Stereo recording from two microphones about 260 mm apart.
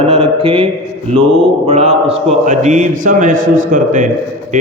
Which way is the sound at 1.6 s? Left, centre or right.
Right.